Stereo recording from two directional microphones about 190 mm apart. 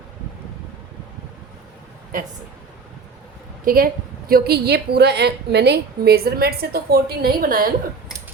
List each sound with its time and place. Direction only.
3.6 s a woman's voice: 50° right (ahead or behind)